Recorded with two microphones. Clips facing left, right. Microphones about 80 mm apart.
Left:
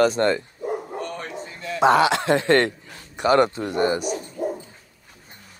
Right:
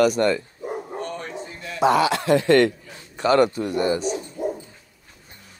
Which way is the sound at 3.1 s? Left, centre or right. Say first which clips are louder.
Even; centre.